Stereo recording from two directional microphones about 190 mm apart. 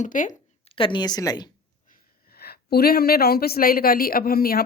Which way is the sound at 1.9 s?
55° left (ahead or behind).